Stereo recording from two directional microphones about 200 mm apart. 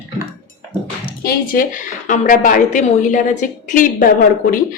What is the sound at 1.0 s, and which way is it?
Speech, 45° left (ahead or behind).